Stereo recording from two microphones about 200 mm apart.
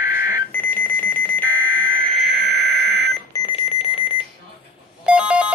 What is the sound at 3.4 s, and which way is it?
Alarm clock, 25° left (ahead or behind).